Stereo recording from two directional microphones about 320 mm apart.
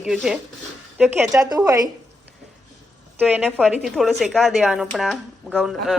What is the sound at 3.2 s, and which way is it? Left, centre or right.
A woman's voice, centre.